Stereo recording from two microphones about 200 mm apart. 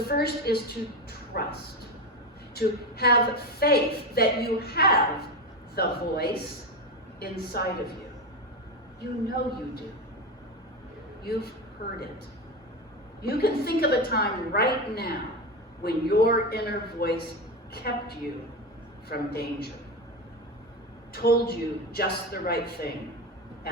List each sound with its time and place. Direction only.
0.0 s a woman's voice: 50° left (ahead or behind)
2.6 s a woman's voice: 50° left (ahead or behind)
9.0 s a woman's voice: 50° left (ahead or behind)
11.2 s speech: 50° left (ahead or behind)
13.2 s a woman's voice: 50° left (ahead or behind)
19.0 s a woman's voice: 50° left (ahead or behind)
21.1 s a woman's voice: 50° left (ahead or behind)